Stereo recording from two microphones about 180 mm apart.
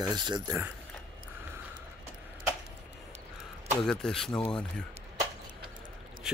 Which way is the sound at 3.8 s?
5° left (ahead or behind).